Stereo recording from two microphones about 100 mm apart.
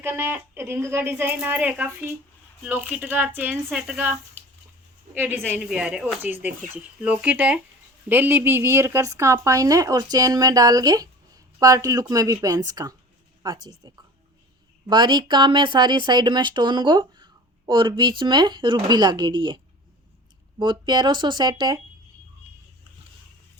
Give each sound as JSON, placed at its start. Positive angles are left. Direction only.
{"t": 0.0, "sound": "speech", "side_deg": -20}
{"t": 3.7, "sound": "a woman's voice", "side_deg": -5}
{"t": 5.1, "sound": "speech", "side_deg": -20}
{"t": 5.6, "sound": "speech", "side_deg": -10}